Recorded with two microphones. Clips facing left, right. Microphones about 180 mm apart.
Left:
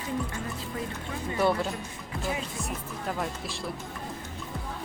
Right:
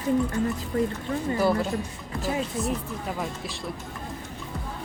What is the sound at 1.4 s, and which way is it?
Speech, centre (ahead or behind).